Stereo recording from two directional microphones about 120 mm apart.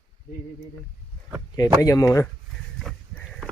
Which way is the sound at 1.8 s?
30° left (ahead or behind).